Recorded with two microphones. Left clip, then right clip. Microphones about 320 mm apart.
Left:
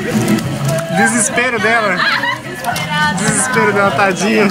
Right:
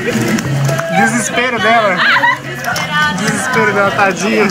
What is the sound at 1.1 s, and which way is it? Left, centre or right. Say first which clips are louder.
Speech: even; centre.